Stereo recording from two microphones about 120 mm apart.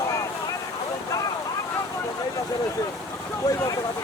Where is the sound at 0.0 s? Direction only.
25° left (ahead or behind).